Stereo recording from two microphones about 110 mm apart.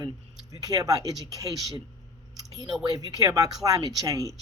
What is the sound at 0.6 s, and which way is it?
Speech, 35° right (ahead or behind).